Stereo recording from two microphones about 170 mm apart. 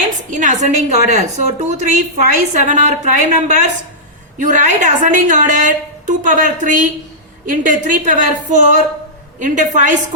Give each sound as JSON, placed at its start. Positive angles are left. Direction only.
{"t": 0.3, "sound": "a woman's voice", "side_deg": -50}